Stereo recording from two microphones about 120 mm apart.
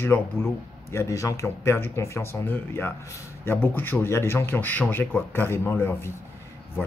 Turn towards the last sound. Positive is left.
turn(degrees=20)  # may be behind; listen again after turning